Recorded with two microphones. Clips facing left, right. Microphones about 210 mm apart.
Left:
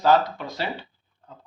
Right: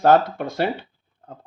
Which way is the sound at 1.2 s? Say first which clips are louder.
Right 6 dB; 55° right (ahead or behind).